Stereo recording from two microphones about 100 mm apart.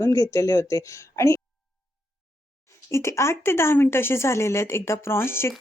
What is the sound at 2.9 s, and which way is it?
Speech, 30° left (ahead or behind).